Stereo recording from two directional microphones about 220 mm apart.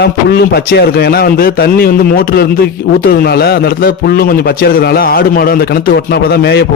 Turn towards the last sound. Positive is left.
turn(degrees=45)  # may be behind; listen again after turning